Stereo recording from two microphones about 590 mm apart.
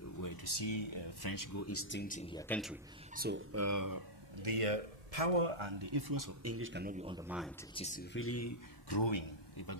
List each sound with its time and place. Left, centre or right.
0.2 s speech: left; by 2.8 s centre
3.2 s speech: centre
4.4 s speech: right; by 7.8 s centre
7.8 s speech: centre
8.8 s speech: left